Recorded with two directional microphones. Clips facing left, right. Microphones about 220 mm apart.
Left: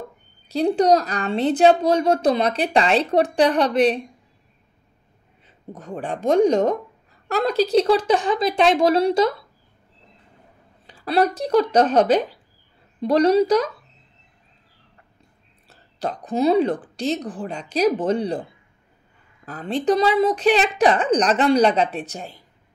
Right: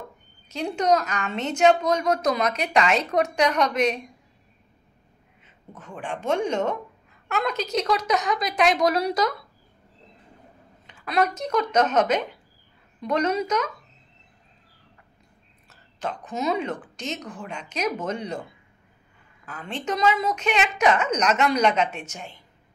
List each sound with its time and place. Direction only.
0.5 s a woman's voice: 35° left (ahead or behind)
5.7 s a woman's voice: 35° left (ahead or behind)
10.9 s a woman's voice: 35° left (ahead or behind)
15.7 s a woman's voice: 35° left (ahead or behind)